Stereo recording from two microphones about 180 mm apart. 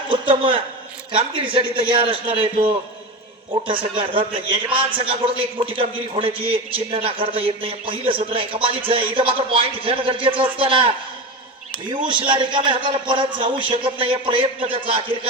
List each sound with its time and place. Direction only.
0.1 s a man's voice: 30° right (ahead or behind)
12.0 s a man's voice: 25° right (ahead or behind)